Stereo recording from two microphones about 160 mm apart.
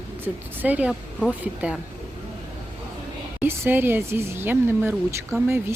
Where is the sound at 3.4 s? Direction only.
15° right (ahead or behind).